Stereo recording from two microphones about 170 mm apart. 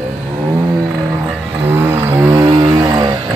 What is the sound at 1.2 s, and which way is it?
Vehicle, 10° right (ahead or behind).